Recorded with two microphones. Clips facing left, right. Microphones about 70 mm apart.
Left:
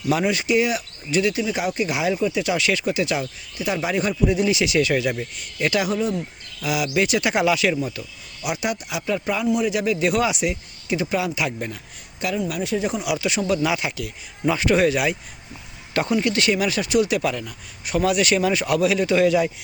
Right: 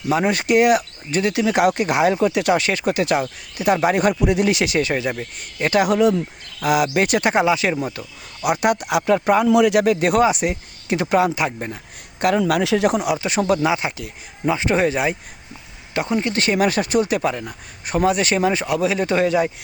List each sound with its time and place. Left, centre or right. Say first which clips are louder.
0.3 s speech: right 5 dB; right
1.3 s speech: right 7 dB; right
5.8 s speech: right 7 dB; right
6.6 s speech: right 4 dB; right
7.4 s speech: right 1 dB; right
7.8 s speech: right 1 dB; right
9.5 s speech: right 4 dB; right
12.4 s speech: right 5 dB; right
13.1 s speech: right 3 dB; right
13.7 s speech: right 3 dB; right
16.1 s speech: right 2 dB; right